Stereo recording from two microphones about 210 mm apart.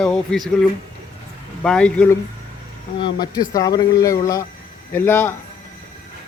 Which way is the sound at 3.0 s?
20° left (ahead or behind).